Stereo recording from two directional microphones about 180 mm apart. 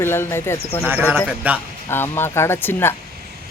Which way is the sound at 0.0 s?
15° left (ahead or behind).